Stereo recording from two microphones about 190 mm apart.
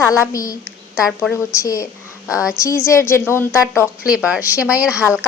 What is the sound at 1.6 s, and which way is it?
A woman's voice, 15° left (ahead or behind).